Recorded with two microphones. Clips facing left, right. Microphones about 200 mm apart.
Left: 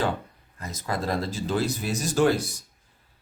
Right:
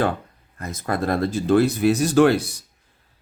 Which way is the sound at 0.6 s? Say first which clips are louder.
Right 5 dB; 55° right (ahead or behind).